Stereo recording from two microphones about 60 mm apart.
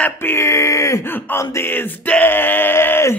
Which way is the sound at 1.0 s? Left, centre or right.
Left.